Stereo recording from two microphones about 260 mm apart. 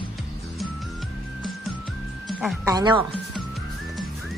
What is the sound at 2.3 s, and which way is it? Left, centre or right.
Music, centre.